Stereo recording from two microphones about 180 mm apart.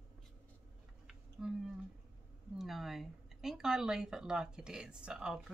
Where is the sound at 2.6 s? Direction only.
Centre (ahead or behind).